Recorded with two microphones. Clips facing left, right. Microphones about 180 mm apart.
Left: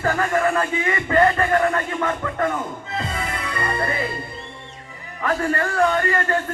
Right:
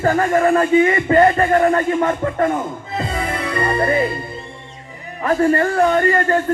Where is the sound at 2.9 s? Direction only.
35° right (ahead or behind).